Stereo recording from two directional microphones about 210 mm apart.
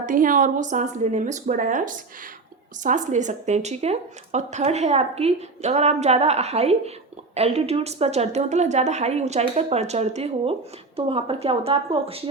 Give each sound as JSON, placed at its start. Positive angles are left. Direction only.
{"t": 0.0, "sound": "a woman's voice", "side_deg": -40}